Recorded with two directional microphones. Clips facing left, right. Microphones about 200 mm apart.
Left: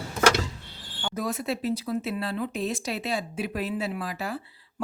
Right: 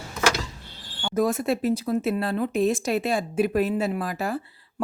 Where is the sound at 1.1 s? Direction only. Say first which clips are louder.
Right 7 dB; 50° right (ahead or behind).